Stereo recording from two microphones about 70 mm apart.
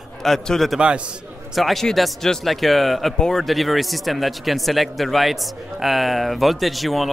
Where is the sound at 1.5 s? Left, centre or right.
Centre.